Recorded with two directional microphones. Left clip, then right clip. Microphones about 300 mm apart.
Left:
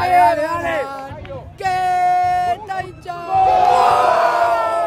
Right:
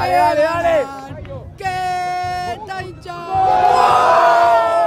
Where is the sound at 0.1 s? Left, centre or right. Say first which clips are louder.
Left 2 dB; centre.